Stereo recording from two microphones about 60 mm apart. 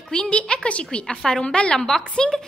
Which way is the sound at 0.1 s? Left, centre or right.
Centre.